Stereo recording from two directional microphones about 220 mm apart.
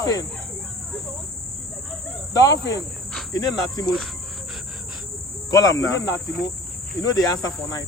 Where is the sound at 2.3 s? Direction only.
15° left (ahead or behind).